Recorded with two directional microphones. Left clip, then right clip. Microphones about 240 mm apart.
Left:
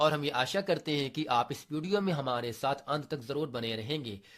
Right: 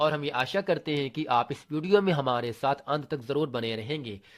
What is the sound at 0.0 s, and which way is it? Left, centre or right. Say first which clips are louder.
Speech: right 2 dB; centre.